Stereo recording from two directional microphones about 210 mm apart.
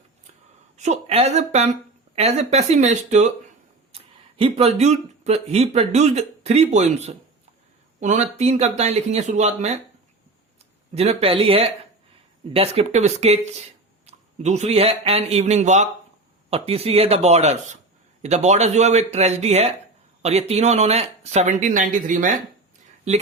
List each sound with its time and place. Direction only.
0.8 s speech: 30° right (ahead or behind)
10.9 s speech: 30° right (ahead or behind)